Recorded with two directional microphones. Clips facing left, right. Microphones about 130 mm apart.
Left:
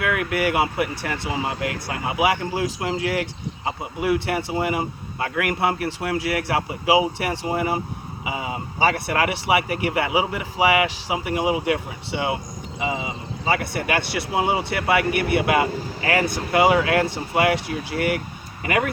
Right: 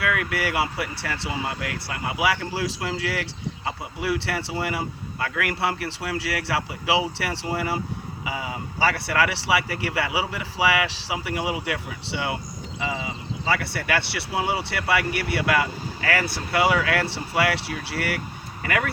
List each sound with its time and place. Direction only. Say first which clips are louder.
0.0 s speech: left 3 dB; 20° left (ahead or behind)